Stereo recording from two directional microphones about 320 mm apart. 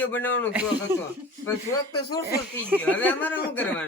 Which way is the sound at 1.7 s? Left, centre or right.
Centre.